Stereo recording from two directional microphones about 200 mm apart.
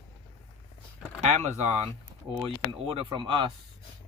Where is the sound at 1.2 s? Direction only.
35° right (ahead or behind).